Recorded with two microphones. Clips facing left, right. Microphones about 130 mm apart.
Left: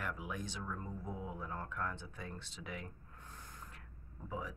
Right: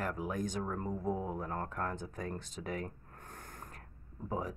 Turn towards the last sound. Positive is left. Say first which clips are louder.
# right 6 dB
turn(degrees=-45)  # may be behind; listen again after turning